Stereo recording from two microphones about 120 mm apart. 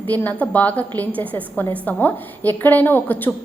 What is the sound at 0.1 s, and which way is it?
A woman's voice, 15° left (ahead or behind).